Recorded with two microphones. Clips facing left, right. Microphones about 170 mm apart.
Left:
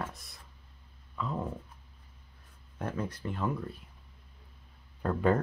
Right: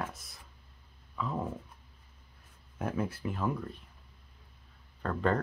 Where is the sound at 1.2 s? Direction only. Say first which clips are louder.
Even; centre (ahead or behind).